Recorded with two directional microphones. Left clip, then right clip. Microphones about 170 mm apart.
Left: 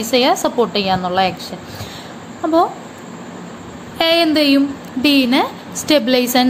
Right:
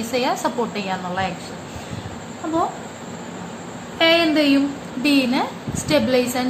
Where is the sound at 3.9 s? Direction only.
60° left (ahead or behind).